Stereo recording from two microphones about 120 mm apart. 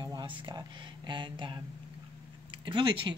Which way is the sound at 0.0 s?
35° right (ahead or behind).